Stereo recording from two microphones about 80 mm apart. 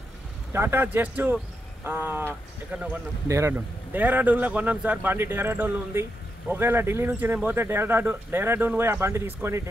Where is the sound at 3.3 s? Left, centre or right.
Right.